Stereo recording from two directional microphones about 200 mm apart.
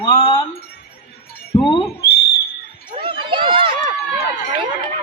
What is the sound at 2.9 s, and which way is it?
Run, 25° right (ahead or behind).